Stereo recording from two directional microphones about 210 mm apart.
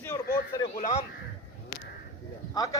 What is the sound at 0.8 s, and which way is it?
Speech, 30° left (ahead or behind).